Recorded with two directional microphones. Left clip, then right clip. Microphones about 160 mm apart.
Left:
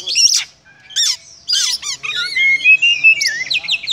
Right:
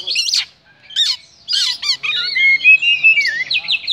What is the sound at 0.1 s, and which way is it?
Bird, 15° left (ahead or behind).